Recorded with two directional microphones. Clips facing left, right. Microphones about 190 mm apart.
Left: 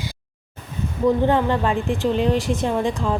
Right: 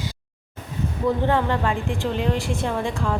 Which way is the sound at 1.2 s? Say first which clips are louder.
Left 3 dB; 15° left (ahead or behind).